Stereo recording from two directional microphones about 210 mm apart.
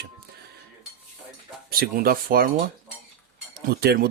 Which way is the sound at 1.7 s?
45° right (ahead or behind).